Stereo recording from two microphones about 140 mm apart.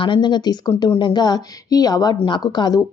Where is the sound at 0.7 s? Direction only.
20° left (ahead or behind).